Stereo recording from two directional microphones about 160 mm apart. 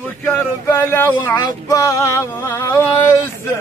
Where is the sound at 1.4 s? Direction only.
25° left (ahead or behind).